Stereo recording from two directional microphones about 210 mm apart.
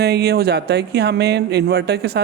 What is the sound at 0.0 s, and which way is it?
Speech, 50° right (ahead or behind).